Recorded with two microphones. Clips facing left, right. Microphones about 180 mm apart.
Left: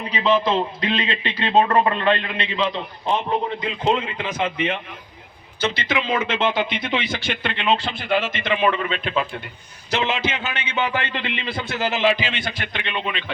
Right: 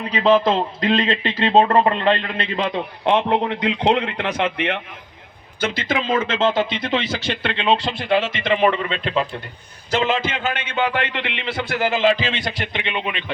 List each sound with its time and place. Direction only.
0.2 s a man's voice: 45° right (ahead or behind)
2.6 s a man's voice: 65° right (ahead or behind)
5.5 s a man's voice: 50° right (ahead or behind); by 9.2 s 30° right (ahead or behind)
9.9 s a man's voice: 50° right (ahead or behind); by 11.9 s 70° right (ahead or behind)
12.0 s a man's voice: 35° right (ahead or behind)
12.7 s a man's voice: 20° right (ahead or behind)